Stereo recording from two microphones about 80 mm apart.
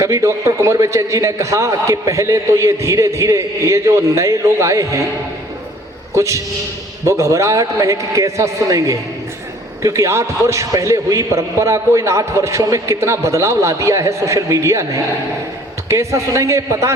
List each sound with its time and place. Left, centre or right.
0.0 s a man's voice: right
6.1 s a man's voice: right